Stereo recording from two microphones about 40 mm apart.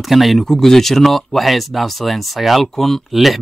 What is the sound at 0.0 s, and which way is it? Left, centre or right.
Speech, centre.